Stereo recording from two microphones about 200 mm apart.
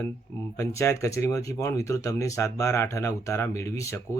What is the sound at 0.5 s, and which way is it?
Speech, 15° left (ahead or behind).